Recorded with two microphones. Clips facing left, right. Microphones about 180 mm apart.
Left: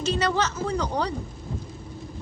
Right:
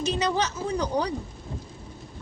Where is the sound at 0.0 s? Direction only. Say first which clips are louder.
Left 1 dB; 15° right (ahead or behind).